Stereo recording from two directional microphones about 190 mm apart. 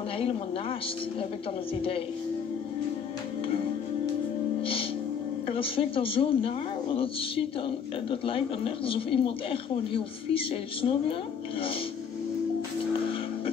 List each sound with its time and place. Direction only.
5.5 s speech: 30° left (ahead or behind)